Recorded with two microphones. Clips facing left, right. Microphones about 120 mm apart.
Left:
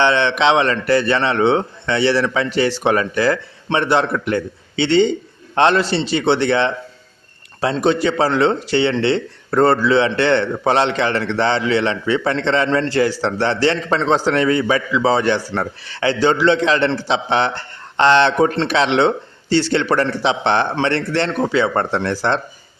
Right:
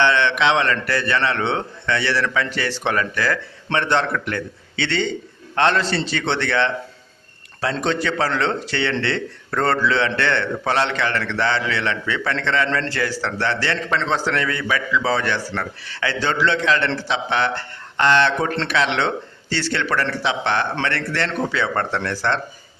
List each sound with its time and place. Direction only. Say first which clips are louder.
0.0 s a man's voice: left 3 dB; 20° left (ahead or behind)
7.8 s a man's voice: left 6 dB; 15° left (ahead or behind)